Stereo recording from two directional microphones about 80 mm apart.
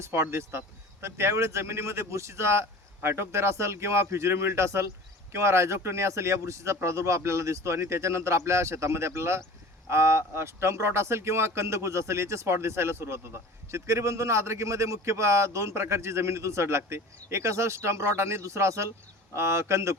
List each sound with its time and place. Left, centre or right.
0.0 s speech: right